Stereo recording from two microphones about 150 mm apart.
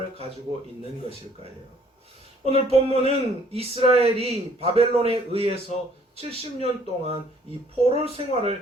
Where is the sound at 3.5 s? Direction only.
40° right (ahead or behind).